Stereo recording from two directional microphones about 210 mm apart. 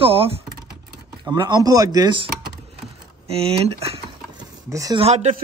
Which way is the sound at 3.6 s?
30° right (ahead or behind).